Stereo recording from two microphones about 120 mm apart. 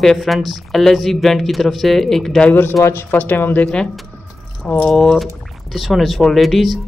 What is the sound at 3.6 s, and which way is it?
A woman's voice, 5° left (ahead or behind).